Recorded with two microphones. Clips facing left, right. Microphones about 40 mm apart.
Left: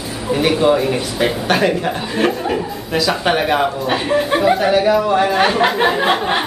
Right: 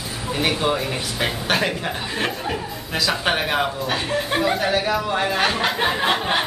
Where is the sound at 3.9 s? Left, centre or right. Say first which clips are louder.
Left 6 dB; centre.